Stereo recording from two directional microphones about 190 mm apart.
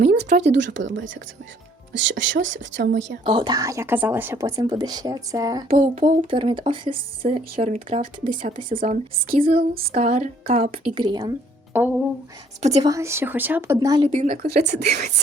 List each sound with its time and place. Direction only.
0.0 s speech: 55° right (ahead or behind)
3.2 s speech: 25° right (ahead or behind)
5.6 s speech: 45° right (ahead or behind)
9.3 s speech: 30° right (ahead or behind)
9.6 s speech: 50° right (ahead or behind)
9.9 s speech: 35° right (ahead or behind)
12.8 s a woman's voice: 15° right (ahead or behind)
14.1 s speech: 45° right (ahead or behind); by 15.1 s 60° right (ahead or behind)